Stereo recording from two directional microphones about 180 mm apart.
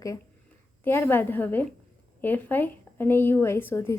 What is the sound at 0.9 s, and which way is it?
A woman's voice, 10° left (ahead or behind).